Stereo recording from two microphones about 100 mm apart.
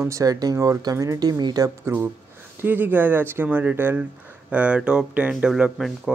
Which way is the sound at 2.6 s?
20° right (ahead or behind).